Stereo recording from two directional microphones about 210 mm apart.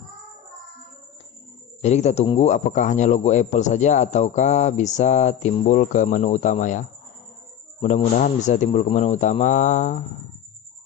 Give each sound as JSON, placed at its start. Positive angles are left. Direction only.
{"t": 1.8, "sound": "a man's voice", "side_deg": 30}